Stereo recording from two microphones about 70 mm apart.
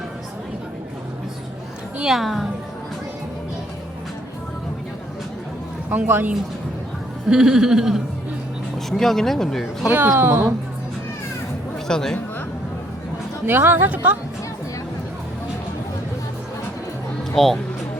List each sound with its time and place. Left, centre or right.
2.0 s speech: centre
5.9 s speech: right
7.3 s speech: centre
8.9 s speech: centre
10.1 s speech: right
11.9 s speech: centre
13.4 s speech: right
13.9 s speech: right
17.3 s speech: centre